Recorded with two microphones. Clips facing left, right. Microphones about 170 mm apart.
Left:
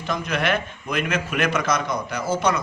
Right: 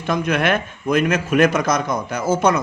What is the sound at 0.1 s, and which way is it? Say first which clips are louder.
A man's voice: right 5 dB; 55° right (ahead or behind).